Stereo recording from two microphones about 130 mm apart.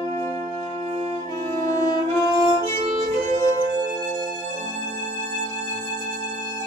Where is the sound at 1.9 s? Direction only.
35° left (ahead or behind).